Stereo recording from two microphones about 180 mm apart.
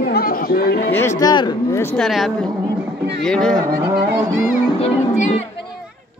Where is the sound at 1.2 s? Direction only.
25° left (ahead or behind).